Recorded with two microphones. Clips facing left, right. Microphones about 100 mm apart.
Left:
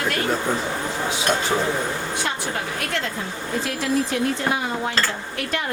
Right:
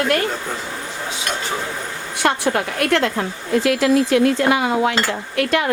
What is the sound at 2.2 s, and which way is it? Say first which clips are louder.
A woman's voice: right 8 dB; 70° right (ahead or behind).